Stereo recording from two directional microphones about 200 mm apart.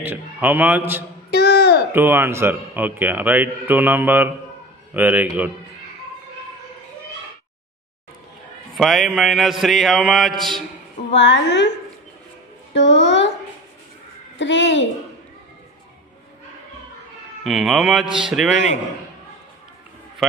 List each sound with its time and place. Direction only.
0.0 s speech: 10° right (ahead or behind)
1.3 s a sound: 55° left (ahead or behind)
1.9 s speech: 10° right (ahead or behind)
8.7 s mantra: centre (ahead or behind)
11.1 s a woman's voice: 60° left (ahead or behind)
12.7 s a sound: 65° left (ahead or behind)
14.4 s a woman's voice: 65° left (ahead or behind)
17.4 s mantra: centre (ahead or behind)
18.0 s speech: 25° right (ahead or behind)
18.3 s mantra: centre (ahead or behind)